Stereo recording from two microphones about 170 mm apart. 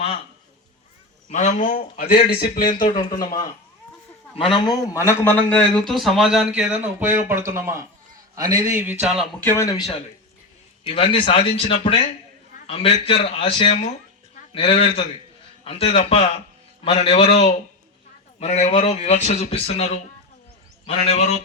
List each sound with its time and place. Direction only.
1.3 s a man's voice: 45° left (ahead or behind)
2.8 s a man's voice: 30° left (ahead or behind)
4.4 s a man's voice: 30° left (ahead or behind)
4.9 s a man's voice: 15° left (ahead or behind); by 9.2 s 5° right (ahead or behind)
9.4 s a man's voice: 15° left (ahead or behind)
10.8 s a man's voice: 35° left (ahead or behind)